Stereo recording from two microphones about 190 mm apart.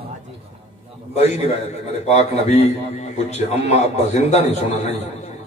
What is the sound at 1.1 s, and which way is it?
A man's voice, 35° left (ahead or behind).